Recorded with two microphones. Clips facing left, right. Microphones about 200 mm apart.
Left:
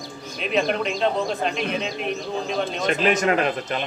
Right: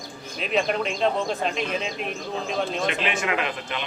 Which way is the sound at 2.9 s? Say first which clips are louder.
Left 6 dB; 40° left (ahead or behind).